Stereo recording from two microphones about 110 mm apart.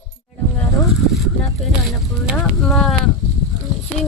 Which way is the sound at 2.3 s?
Centre (ahead or behind).